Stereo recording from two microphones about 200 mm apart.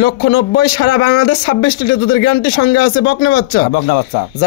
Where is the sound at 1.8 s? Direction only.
20° left (ahead or behind).